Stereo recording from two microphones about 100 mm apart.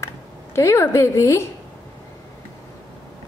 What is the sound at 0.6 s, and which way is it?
Speech, 30° left (ahead or behind).